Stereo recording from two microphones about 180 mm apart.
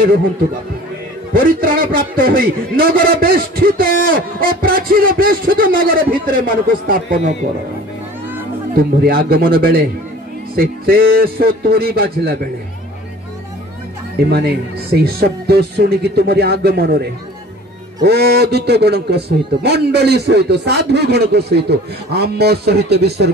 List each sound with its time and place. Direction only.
1.3 s a man's voice: 55° right (ahead or behind)
8.7 s a man's voice: 55° right (ahead or behind)
14.2 s a man's voice: 60° right (ahead or behind)
18.0 s a man's voice: 65° right (ahead or behind)